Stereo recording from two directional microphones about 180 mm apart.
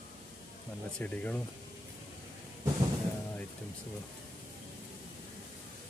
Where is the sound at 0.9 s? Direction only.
10° left (ahead or behind).